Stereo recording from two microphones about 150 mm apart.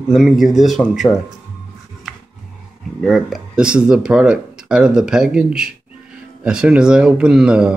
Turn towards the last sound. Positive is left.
turn(degrees=-5)  # may be behind; listen again after turning